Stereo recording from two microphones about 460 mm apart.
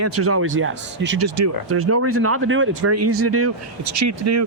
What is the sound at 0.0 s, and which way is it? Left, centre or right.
Speech, right.